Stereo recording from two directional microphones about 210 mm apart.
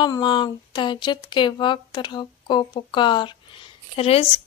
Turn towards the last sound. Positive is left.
turn(degrees=30)  # may be behind; listen again after turning